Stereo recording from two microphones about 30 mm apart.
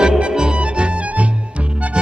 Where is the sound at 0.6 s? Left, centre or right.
Right.